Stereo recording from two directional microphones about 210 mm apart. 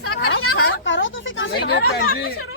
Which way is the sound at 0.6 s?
65° left (ahead or behind).